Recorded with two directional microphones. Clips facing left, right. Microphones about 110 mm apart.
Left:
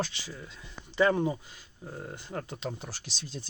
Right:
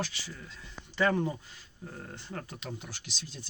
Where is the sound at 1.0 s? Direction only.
20° left (ahead or behind).